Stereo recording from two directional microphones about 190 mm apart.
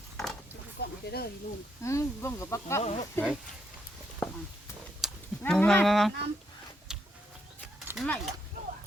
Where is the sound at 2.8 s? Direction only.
35° left (ahead or behind).